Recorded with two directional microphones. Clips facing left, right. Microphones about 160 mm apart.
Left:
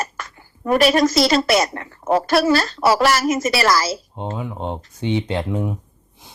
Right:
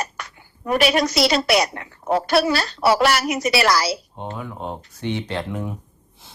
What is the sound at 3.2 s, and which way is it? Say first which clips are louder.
Speech: left 3 dB; 45° left (ahead or behind).